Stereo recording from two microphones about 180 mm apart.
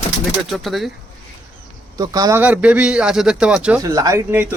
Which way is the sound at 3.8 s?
20° right (ahead or behind).